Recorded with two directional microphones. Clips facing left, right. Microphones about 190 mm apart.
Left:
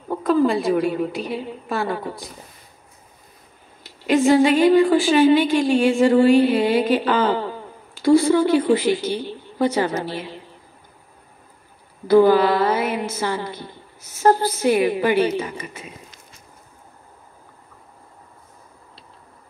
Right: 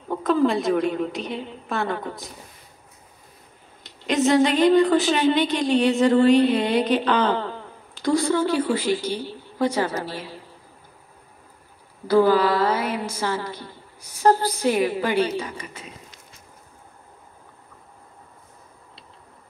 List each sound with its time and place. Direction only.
0.1 s a woman's voice: 5° left (ahead or behind)
4.0 s a woman's voice: 5° left (ahead or behind); by 10.4 s 20° left (ahead or behind)
12.1 s speech: 15° left (ahead or behind)
14.6 s speech: 15° left (ahead or behind)